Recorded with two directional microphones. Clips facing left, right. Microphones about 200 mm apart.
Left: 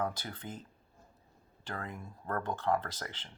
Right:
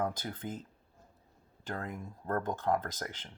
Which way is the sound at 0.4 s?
10° right (ahead or behind).